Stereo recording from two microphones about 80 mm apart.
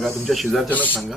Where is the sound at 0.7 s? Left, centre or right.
Left.